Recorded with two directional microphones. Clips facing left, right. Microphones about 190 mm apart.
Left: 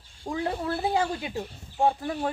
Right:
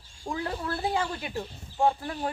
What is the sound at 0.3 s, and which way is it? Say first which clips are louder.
Speech: left 3 dB; 20° left (ahead or behind).